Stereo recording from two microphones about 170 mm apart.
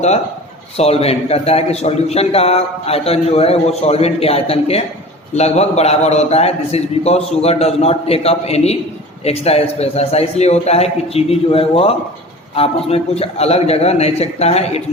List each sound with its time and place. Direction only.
0.8 s a man's voice: 35° left (ahead or behind)